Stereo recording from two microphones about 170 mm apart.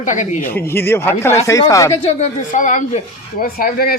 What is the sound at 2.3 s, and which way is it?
Speech, 50° left (ahead or behind).